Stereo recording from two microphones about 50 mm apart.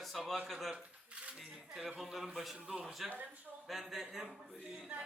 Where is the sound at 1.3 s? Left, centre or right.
Centre.